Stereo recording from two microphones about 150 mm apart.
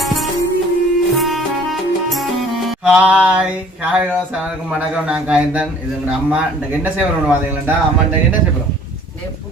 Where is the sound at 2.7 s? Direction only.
5° right (ahead or behind).